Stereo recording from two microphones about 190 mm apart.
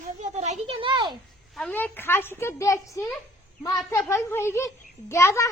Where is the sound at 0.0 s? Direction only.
40° right (ahead or behind).